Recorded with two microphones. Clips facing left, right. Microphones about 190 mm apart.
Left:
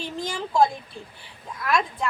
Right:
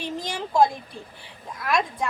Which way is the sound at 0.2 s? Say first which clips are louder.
Even; 15° right (ahead or behind).